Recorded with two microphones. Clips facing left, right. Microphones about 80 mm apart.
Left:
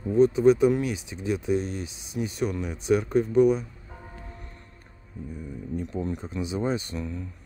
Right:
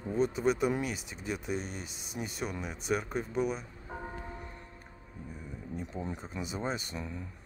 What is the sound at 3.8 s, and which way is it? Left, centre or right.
Music, right.